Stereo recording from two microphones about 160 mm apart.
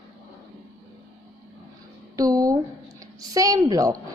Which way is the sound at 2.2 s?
20° right (ahead or behind).